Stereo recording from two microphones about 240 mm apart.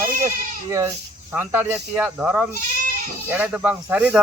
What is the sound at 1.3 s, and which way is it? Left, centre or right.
Speech, centre.